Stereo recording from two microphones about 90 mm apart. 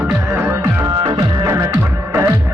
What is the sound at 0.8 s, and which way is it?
Music, 50° right (ahead or behind).